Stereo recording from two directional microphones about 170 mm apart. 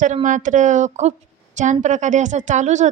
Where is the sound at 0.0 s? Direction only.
45° right (ahead or behind).